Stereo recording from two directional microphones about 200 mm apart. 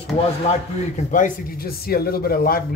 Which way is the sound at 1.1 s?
45° left (ahead or behind).